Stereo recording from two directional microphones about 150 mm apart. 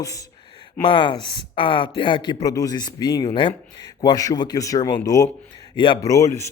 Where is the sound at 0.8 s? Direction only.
35° left (ahead or behind).